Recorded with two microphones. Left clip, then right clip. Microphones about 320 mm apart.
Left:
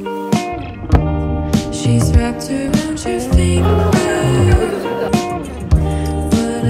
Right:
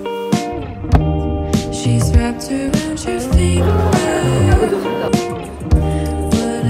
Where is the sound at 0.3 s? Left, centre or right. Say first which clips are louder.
Left 1 dB; centre.